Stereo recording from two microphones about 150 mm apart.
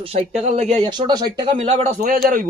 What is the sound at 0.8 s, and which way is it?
Speech, 30° right (ahead or behind).